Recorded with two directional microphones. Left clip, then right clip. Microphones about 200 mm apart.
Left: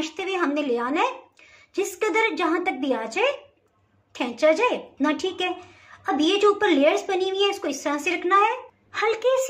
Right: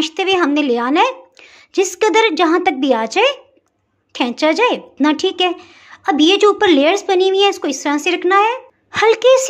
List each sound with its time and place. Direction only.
0.0 s speech: 50° right (ahead or behind)